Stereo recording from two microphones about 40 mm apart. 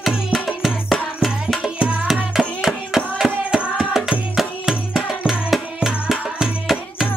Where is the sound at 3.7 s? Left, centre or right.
Centre.